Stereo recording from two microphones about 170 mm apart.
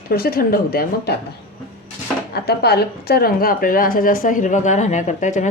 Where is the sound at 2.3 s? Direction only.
70° left (ahead or behind).